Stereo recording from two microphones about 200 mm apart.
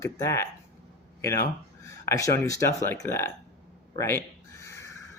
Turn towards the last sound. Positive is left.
turn(degrees=15)  # may be behind; listen again after turning